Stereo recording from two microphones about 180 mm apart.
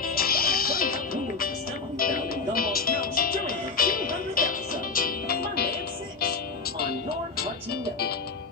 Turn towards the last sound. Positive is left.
turn(degrees=55)  # may be behind; listen again after turning